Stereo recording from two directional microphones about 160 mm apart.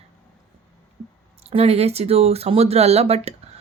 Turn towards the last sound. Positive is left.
turn(degrees=-40)  # may be behind; listen again after turning